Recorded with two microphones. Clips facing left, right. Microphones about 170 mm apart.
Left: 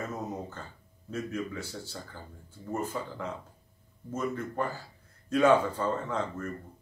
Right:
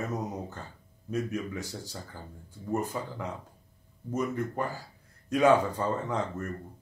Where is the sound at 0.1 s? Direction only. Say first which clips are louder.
Right 2 dB; 15° right (ahead or behind).